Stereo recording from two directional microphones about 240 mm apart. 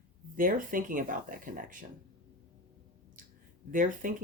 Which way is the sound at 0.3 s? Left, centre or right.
Right.